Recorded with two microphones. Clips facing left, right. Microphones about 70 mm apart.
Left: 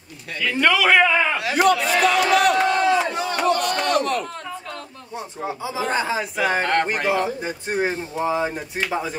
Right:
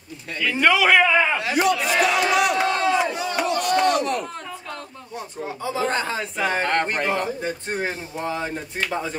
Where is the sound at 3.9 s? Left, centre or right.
Left.